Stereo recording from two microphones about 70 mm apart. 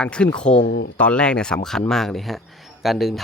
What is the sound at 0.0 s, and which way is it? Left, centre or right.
Speech, centre.